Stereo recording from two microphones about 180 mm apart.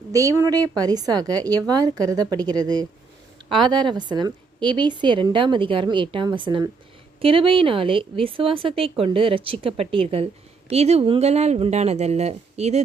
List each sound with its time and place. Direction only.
0.1 s a woman's voice: 20° right (ahead or behind); by 12.8 s 35° right (ahead or behind)